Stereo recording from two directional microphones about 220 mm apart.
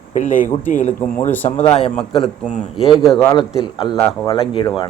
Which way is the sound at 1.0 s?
10° left (ahead or behind).